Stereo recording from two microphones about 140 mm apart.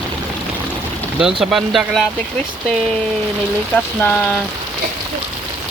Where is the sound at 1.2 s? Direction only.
Centre (ahead or behind).